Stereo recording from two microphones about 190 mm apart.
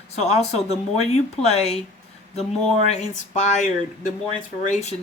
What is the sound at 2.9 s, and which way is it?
Speech, 35° left (ahead or behind).